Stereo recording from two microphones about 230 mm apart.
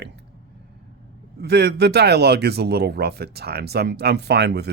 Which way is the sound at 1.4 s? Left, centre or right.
Right.